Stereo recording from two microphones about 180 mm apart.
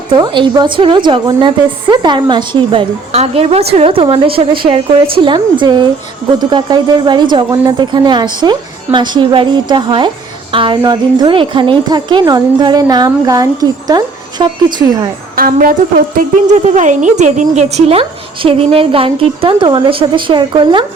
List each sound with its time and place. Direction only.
0.2 s a woman's voice: 25° right (ahead or behind)
15.4 s a woman's voice: 50° right (ahead or behind); by 20.8 s 25° right (ahead or behind)